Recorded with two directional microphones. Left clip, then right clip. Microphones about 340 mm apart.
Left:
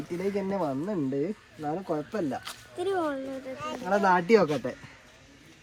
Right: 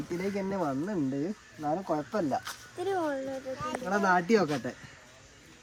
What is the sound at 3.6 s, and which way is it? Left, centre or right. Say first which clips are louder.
Speech: left 4 dB; centre.